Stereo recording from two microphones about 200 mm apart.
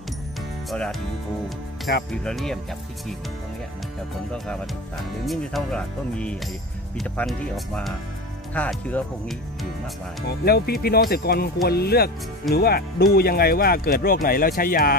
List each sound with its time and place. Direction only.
0.7 s music: 5° left (ahead or behind)
1.9 s speech: 50° left (ahead or behind)
2.2 s speech: centre (ahead or behind)
5.2 s speech: centre (ahead or behind)
10.2 s speech: 50° left (ahead or behind)